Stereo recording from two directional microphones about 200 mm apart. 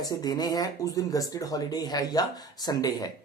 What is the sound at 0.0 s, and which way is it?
Speech, 20° left (ahead or behind).